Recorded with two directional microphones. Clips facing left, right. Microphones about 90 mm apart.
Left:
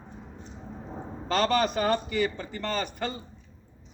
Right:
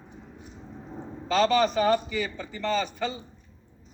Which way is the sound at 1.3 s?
50° left (ahead or behind).